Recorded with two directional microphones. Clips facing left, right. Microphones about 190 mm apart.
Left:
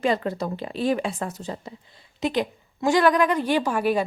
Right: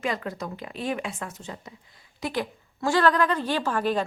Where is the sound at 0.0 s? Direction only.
30° left (ahead or behind).